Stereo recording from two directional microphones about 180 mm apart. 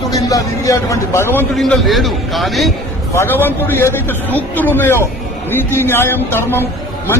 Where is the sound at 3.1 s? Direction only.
15° left (ahead or behind).